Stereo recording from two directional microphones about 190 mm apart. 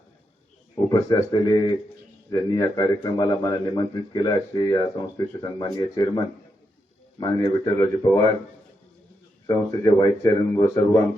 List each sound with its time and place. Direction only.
0.9 s a man's voice: 20° left (ahead or behind)
7.2 s a man's voice: 20° left (ahead or behind)
9.5 s a man's voice: 20° left (ahead or behind)